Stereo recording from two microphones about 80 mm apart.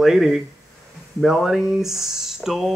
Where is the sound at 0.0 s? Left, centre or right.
Centre.